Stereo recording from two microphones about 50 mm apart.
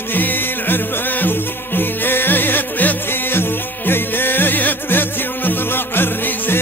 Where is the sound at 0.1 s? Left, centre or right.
Left.